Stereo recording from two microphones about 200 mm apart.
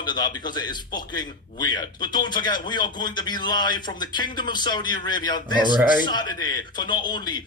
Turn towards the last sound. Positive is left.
turn(degrees=20)  # may be behind; listen again after turning